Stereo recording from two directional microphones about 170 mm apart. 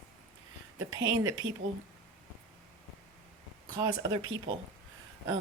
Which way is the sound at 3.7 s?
25° right (ahead or behind).